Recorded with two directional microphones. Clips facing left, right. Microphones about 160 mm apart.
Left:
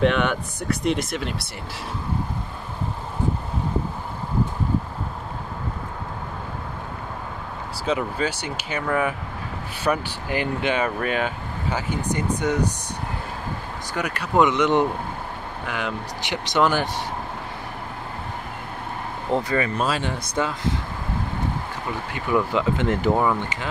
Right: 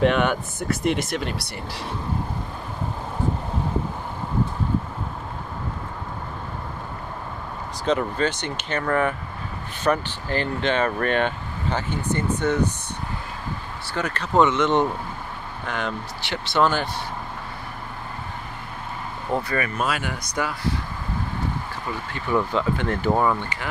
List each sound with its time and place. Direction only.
0.0 s speech: centre (ahead or behind)
7.8 s speech: 10° left (ahead or behind)
13.9 s speech: 10° left (ahead or behind)
19.3 s speech: 25° left (ahead or behind)
22.1 s speech: 15° left (ahead or behind)